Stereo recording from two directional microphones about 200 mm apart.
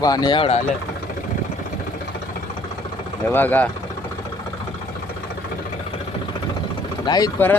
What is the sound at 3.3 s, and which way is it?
Speech, 10° left (ahead or behind).